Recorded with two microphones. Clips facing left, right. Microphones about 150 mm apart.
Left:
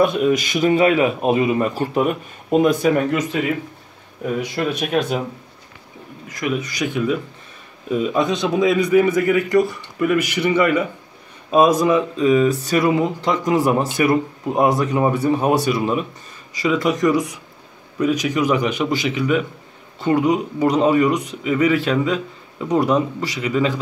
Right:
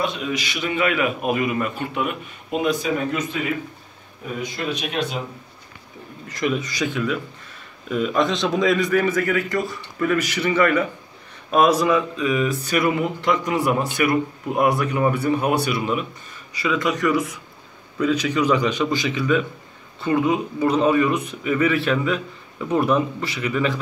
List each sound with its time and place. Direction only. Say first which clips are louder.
0.0 s speech: left 9 dB; 50° left (ahead or behind)
4.4 s speech: left 2 dB; 55° left (ahead or behind)
6.3 s a man's voice: even; 10° left (ahead or behind)
11.8 s a man's voice: left 3 dB; 25° left (ahead or behind)